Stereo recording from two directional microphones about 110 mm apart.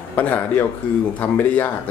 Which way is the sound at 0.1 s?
15° left (ahead or behind).